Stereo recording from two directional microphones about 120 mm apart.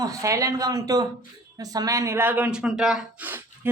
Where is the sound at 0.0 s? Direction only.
25° right (ahead or behind); by 3.2 s 5° right (ahead or behind).